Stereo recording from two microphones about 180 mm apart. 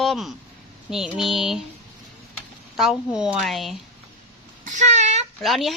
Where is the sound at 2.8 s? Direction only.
Centre (ahead or behind).